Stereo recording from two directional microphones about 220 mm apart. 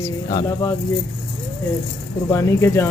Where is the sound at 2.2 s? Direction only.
15° left (ahead or behind).